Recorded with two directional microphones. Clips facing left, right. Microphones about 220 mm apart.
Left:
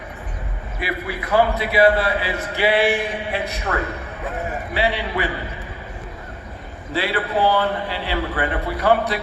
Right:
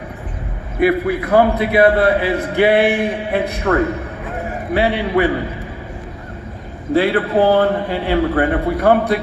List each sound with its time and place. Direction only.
0.8 s a man's voice: 55° right (ahead or behind)
6.9 s a man's voice: 50° right (ahead or behind)